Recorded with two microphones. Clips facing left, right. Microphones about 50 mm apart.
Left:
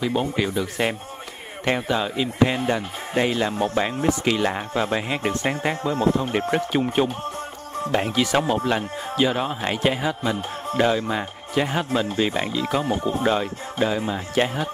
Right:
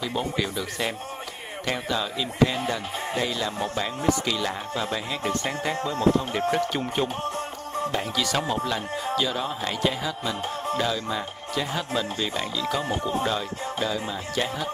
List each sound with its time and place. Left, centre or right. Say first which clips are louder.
0.0 s speech: left 4 dB; left
6.7 s speech: left 5 dB; centre
7.9 s speech: left 8 dB; left